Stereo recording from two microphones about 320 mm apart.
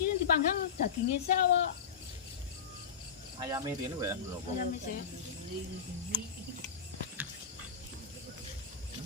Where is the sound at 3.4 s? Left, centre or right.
Centre.